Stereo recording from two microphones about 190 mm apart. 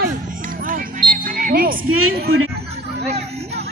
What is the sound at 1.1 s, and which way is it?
Music, 45° right (ahead or behind).